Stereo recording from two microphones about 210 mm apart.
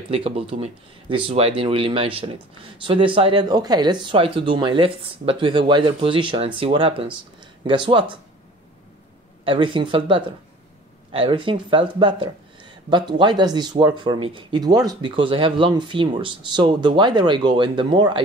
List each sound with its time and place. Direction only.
0.1 s speech: 25° right (ahead or behind)
9.4 s speech: 25° right (ahead or behind)